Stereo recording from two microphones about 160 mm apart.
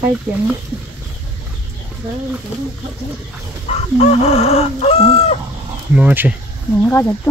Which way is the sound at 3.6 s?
40° left (ahead or behind).